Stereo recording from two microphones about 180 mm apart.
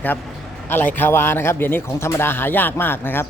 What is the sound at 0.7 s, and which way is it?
Speech, 10° left (ahead or behind).